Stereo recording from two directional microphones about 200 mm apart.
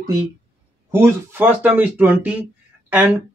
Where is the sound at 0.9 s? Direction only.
15° right (ahead or behind).